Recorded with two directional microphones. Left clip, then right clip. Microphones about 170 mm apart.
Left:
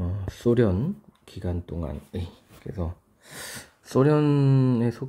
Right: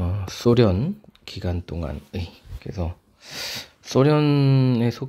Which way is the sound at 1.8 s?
25° right (ahead or behind).